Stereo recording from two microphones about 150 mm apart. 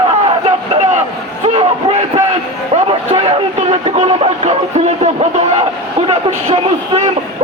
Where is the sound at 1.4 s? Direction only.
45° right (ahead or behind).